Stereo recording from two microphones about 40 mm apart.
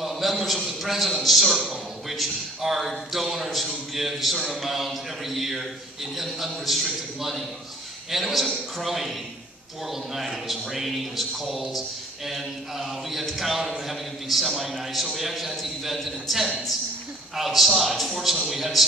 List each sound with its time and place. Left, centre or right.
0.0 s a sound: centre
0.7 s a man's voice: centre
10.1 s a man's voice: centre